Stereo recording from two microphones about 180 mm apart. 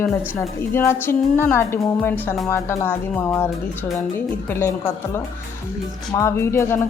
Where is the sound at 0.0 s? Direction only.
15° left (ahead or behind).